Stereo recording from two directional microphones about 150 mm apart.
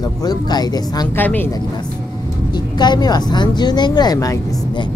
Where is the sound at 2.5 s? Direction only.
30° left (ahead or behind).